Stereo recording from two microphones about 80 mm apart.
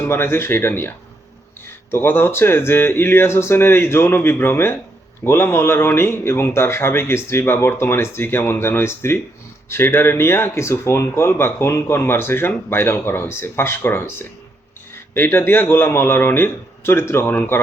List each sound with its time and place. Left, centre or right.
0.0 s speech: left